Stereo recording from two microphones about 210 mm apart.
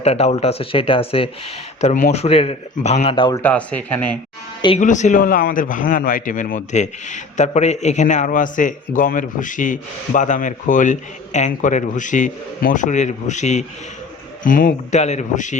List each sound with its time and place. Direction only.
0.0 s speech: 30° left (ahead or behind)
3.4 s speech: 5° left (ahead or behind)
4.8 s a man's voice: 35° left (ahead or behind)